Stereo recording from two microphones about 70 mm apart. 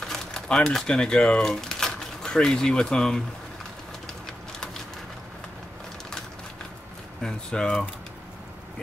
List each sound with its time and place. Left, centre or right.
0.0 s speech: centre
7.2 s speech: centre